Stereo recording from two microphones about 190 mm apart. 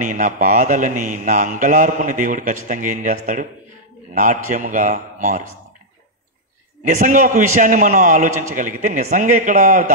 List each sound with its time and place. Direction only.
0.0 s a man's voice: 40° right (ahead or behind)
7.0 s a man's voice: 40° right (ahead or behind)